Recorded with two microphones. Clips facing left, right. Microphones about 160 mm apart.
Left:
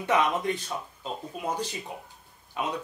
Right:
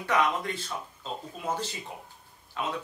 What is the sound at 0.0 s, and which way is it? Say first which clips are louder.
Speech: left 2 dB; 20° left (ahead or behind).